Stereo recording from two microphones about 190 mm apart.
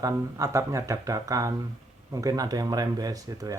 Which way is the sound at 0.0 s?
20° right (ahead or behind).